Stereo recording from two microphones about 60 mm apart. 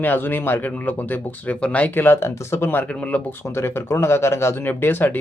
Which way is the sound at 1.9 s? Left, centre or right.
Left.